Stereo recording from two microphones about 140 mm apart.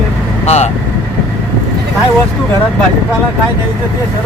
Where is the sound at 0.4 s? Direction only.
50° left (ahead or behind).